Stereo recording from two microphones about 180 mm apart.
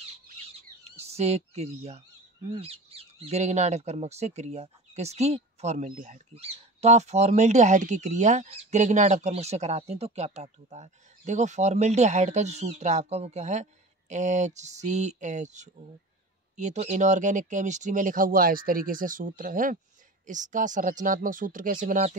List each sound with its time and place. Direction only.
0.6 s bird: 35° right (ahead or behind)
2.5 s speech: 35° right (ahead or behind)